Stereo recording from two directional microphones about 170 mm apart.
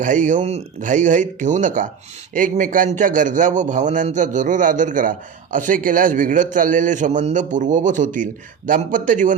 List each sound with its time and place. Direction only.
0.0 s a man's voice: 50° right (ahead or behind)